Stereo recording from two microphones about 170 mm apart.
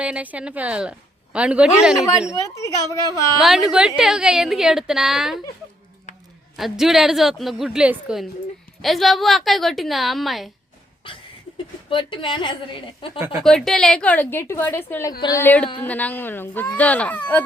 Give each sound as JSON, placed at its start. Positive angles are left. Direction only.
{"t": 0.0, "sound": "a woman's voice", "side_deg": -10}
{"t": 2.3, "sound": "a woman's voice", "side_deg": 20}
{"t": 3.3, "sound": "a woman's voice", "side_deg": 0}
{"t": 6.6, "sound": "a woman's voice", "side_deg": 0}
{"t": 11.0, "sound": "a woman's voice", "side_deg": 30}
{"t": 13.4, "sound": "a woman's voice", "side_deg": 0}